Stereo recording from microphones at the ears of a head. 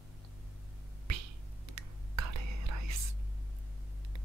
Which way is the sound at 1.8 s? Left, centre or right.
Right.